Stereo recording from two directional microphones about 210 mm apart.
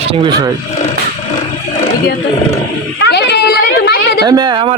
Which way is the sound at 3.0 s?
55° left (ahead or behind).